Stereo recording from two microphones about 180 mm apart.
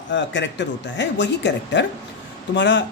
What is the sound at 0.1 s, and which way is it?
Speech, 90° left.